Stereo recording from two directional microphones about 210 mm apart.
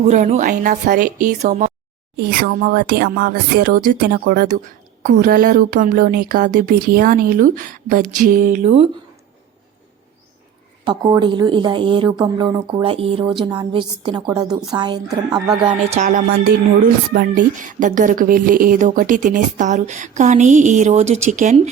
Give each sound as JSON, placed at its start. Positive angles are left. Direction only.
{"t": 0.0, "sound": "speech", "side_deg": -30}
{"t": 10.8, "sound": "a woman's voice", "side_deg": -20}
{"t": 16.0, "sound": "speech", "side_deg": -40}